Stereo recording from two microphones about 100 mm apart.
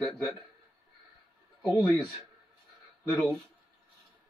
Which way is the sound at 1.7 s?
10° right (ahead or behind).